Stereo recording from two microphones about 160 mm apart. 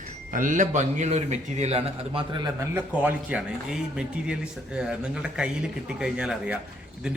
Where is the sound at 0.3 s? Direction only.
55° right (ahead or behind); by 2.5 s 30° right (ahead or behind).